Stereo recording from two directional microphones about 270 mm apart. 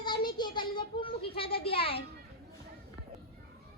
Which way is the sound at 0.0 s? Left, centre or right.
Centre.